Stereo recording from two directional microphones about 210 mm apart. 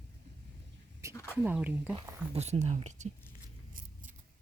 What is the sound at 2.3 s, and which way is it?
Speech, 30° right (ahead or behind).